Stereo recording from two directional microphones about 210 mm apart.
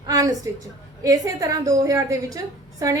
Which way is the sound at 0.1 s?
15° right (ahead or behind).